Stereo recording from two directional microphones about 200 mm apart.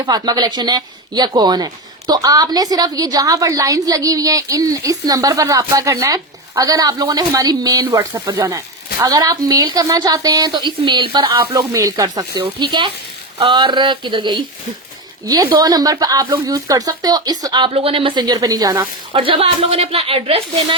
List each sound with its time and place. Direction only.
0.0 s speech: 20° right (ahead or behind)